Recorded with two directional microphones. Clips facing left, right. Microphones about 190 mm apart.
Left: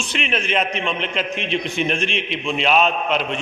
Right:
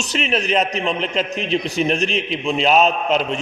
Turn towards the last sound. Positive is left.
turn(degrees=-40)  # may be behind; listen again after turning